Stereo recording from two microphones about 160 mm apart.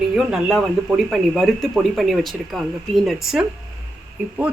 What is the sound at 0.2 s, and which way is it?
Speech, 5° right (ahead or behind).